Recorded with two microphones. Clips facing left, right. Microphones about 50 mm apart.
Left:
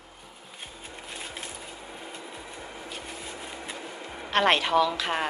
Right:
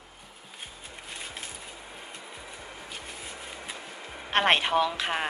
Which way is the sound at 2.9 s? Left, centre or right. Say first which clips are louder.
Left 2 dB; centre.